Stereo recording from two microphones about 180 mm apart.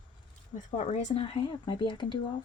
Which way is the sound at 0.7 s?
40° left (ahead or behind).